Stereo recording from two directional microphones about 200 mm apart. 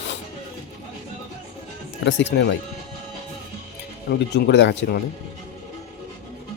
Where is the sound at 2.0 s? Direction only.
60° left (ahead or behind).